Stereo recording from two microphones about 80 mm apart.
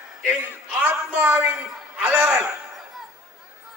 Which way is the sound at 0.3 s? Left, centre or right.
Centre.